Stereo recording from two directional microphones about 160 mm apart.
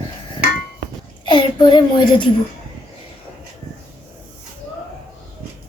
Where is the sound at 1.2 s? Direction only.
30° left (ahead or behind).